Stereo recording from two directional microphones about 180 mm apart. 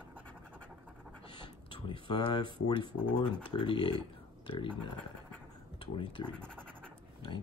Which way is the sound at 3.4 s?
25° left (ahead or behind).